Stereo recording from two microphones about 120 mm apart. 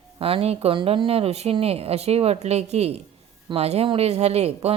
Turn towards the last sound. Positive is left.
turn(degrees=-60)  # may be behind; listen again after turning